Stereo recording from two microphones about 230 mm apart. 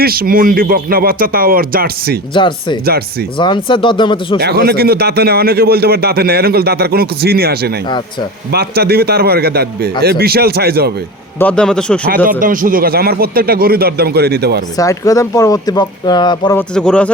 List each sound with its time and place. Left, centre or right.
0.0 s speech: right
2.3 s speech: left
2.8 s speech: right
3.3 s speech: left
4.4 s speech: right
11.3 s a man's voice: centre
12.0 s speech: right
14.8 s speech: centre
16.7 s a man's voice: centre